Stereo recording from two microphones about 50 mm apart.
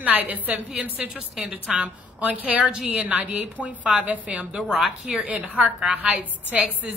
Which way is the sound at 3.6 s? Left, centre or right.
Centre.